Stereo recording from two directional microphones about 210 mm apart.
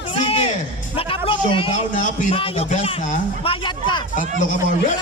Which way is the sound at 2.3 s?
25° left (ahead or behind).